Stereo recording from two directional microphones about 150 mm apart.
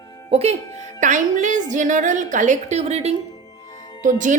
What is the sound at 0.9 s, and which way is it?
A woman's voice, 55° right (ahead or behind).